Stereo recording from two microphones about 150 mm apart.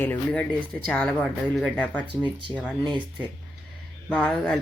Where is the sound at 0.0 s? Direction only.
10° left (ahead or behind).